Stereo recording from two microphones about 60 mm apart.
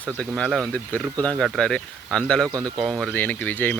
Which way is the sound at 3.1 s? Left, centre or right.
Left.